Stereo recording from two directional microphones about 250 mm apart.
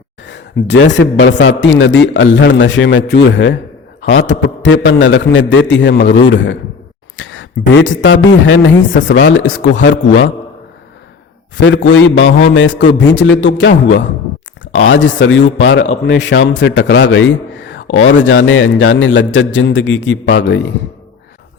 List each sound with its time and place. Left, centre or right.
0.3 s a man's voice: left
7.2 s a sound: left
7.7 s a man's voice: left
11.5 s a man's voice: left